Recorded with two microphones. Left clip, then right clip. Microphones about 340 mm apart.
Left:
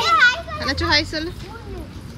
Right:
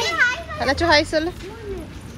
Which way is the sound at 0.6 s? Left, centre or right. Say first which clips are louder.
Right 5 dB; centre.